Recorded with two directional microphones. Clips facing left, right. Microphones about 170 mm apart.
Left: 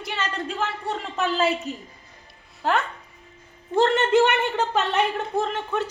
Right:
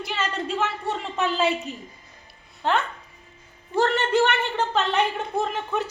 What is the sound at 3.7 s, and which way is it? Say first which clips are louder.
Speech: left 3 dB; 20° left (ahead or behind).